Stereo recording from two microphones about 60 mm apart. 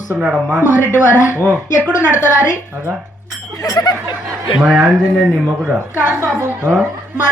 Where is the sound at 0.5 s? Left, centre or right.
Right.